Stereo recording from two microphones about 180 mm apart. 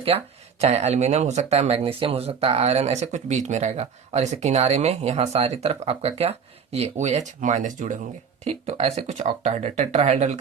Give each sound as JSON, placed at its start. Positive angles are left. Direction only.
{"t": 0.1, "sound": "speech", "side_deg": -35}
{"t": 8.4, "sound": "speech", "side_deg": -35}